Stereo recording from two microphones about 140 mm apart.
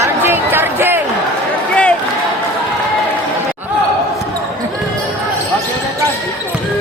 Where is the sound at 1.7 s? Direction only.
10° left (ahead or behind).